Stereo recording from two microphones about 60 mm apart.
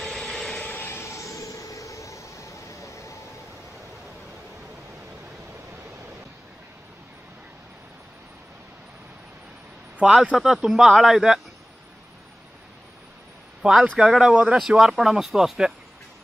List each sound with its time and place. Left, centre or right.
0.0 s vehicle: centre
0.6 s vehicle: left
9.9 s a man's voice: centre
10.3 s speech: centre
13.6 s a sound: centre
13.9 s speech: centre
14.7 s speech: centre